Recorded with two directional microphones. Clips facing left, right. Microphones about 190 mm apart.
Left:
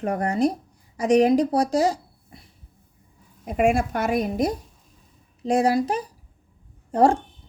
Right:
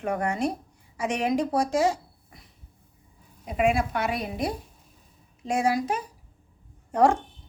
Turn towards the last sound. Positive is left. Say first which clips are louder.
# left 3 dB
turn(degrees=30)  # may be behind; listen again after turning